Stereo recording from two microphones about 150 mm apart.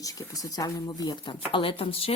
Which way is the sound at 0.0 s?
25° left (ahead or behind).